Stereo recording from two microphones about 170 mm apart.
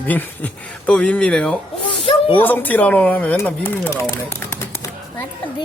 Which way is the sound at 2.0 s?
30° left (ahead or behind).